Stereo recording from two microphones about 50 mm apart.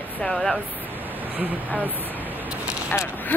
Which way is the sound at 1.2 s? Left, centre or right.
Right.